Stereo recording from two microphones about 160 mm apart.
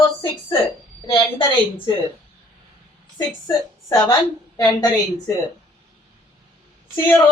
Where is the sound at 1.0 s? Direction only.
30° left (ahead or behind).